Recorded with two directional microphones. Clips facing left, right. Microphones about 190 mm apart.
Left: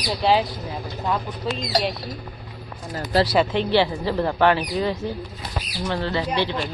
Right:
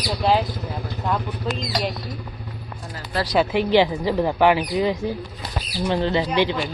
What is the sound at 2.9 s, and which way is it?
Speech, 35° left (ahead or behind).